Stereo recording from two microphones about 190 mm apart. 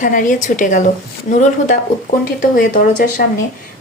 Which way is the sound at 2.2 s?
45° left (ahead or behind).